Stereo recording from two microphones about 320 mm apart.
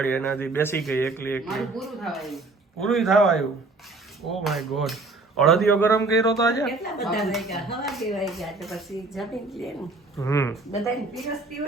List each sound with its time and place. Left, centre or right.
0.0 s a man's voice: centre